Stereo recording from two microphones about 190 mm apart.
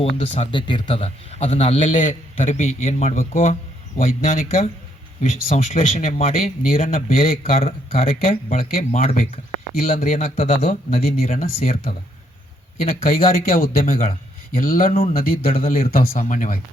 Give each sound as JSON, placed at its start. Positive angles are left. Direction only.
{"t": 0.0, "sound": "a man's voice", "side_deg": 30}
{"t": 5.5, "sound": "a man's voice", "side_deg": 35}
{"t": 7.1, "sound": "speech", "side_deg": 50}
{"t": 7.5, "sound": "a man's voice", "side_deg": 30}
{"t": 11.7, "sound": "speech", "side_deg": 50}